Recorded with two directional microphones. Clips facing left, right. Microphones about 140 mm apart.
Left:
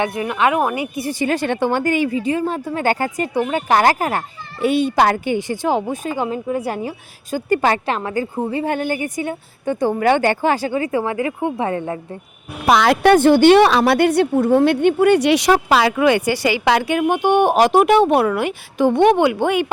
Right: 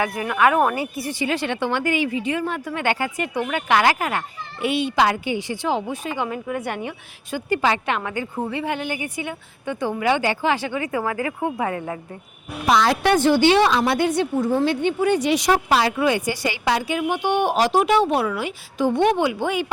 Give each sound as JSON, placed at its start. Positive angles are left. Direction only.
{"t": 0.0, "sound": "speech", "side_deg": 25}
{"t": 1.2, "sound": "a woman's voice", "side_deg": 45}
{"t": 6.2, "sound": "a woman's voice", "side_deg": 30}
{"t": 7.9, "sound": "a woman's voice", "side_deg": 35}
{"t": 12.6, "sound": "a woman's voice", "side_deg": 65}